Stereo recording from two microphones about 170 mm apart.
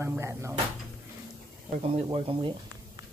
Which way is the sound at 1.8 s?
30° right (ahead or behind).